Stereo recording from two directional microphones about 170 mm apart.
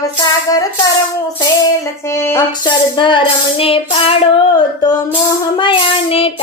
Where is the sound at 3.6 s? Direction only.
35° left (ahead or behind).